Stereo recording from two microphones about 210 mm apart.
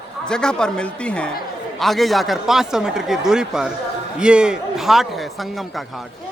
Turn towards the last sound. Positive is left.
turn(degrees=0)  # may be behind; listen again after turning